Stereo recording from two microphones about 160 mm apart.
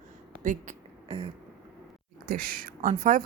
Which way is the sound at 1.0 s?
35° right (ahead or behind).